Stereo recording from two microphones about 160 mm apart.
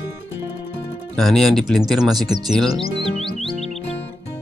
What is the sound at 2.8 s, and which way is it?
Music, 35° left (ahead or behind).